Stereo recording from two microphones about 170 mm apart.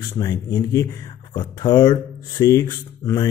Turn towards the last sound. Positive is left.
turn(degrees=20)  # may be behind; listen again after turning